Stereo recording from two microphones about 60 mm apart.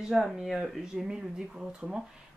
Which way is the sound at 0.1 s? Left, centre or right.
Centre.